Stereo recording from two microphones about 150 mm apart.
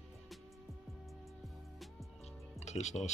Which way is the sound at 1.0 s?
Centre (ahead or behind).